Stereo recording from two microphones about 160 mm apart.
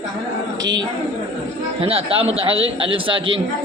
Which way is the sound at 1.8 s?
35° right (ahead or behind).